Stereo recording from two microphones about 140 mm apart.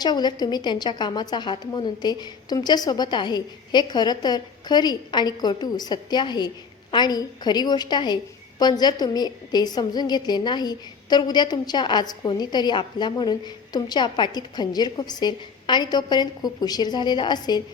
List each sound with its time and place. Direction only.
0.0 s a woman's voice: 30° left (ahead or behind)